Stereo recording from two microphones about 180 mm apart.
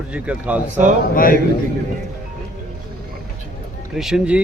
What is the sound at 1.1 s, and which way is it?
Speech, 50° left (ahead or behind).